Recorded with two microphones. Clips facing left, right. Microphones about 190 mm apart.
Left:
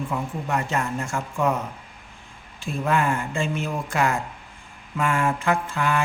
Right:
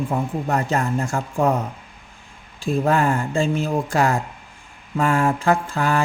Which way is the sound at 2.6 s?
35° right (ahead or behind).